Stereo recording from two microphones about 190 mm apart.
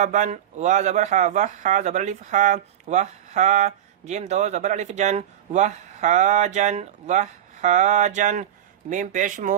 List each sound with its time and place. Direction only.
0.0 s speech: 40° right (ahead or behind)